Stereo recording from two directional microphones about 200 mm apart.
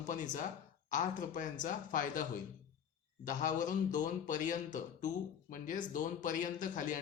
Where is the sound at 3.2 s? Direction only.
40° left (ahead or behind).